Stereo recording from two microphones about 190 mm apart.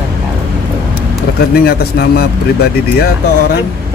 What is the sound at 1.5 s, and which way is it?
Speech, 55° left (ahead or behind).